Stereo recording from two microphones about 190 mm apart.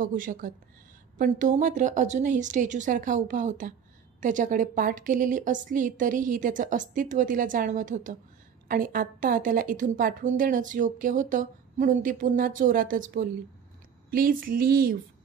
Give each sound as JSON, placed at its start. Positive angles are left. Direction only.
{"t": 0.0, "sound": "a woman's voice", "side_deg": -45}